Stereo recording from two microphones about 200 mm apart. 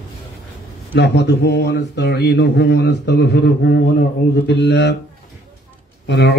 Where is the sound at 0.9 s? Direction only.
60° left (ahead or behind).